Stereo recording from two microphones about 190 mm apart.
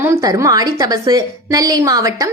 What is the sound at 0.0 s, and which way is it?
A woman's voice, 15° right (ahead or behind).